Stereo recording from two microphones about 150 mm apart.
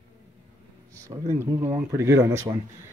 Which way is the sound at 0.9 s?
20° right (ahead or behind).